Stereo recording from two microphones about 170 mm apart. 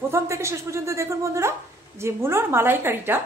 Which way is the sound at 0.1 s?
15° right (ahead or behind).